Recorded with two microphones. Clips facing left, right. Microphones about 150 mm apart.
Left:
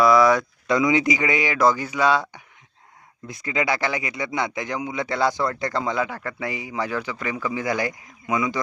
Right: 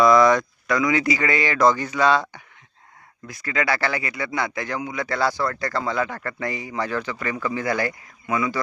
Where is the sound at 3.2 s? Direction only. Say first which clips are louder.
Even; 20° left (ahead or behind).